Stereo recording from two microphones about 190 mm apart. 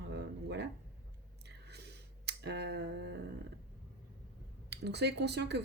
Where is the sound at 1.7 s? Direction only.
60° right (ahead or behind).